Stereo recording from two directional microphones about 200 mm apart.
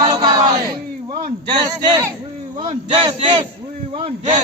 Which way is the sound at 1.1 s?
45° right (ahead or behind).